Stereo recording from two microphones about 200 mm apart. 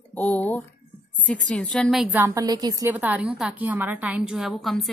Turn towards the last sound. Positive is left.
turn(degrees=0)  # may be behind; listen again after turning